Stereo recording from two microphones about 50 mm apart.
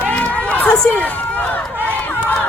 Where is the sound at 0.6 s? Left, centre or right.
Left.